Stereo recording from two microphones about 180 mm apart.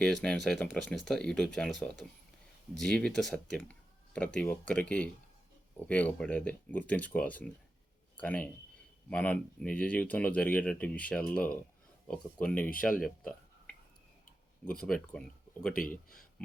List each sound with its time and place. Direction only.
0.0 s speech: 5° left (ahead or behind)
13.0 s a sound: 5° left (ahead or behind)
14.6 s speech: 5° left (ahead or behind)